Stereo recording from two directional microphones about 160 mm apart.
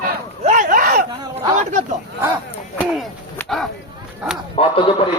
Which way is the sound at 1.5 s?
45° right (ahead or behind).